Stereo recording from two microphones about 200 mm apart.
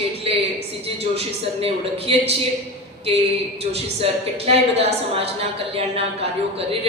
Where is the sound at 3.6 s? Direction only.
30° right (ahead or behind).